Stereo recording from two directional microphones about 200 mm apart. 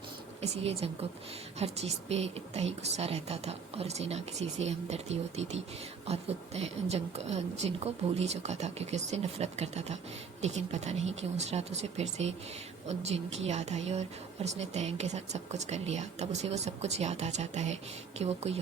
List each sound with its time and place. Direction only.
0.4 s a woman's voice: 30° right (ahead or behind)